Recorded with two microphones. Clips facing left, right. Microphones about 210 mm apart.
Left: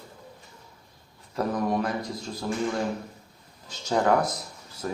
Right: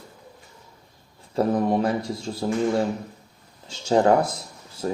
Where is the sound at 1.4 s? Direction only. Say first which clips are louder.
Right 5 dB; 30° right (ahead or behind).